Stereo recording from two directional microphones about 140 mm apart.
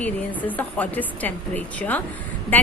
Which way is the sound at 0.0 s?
10° left (ahead or behind).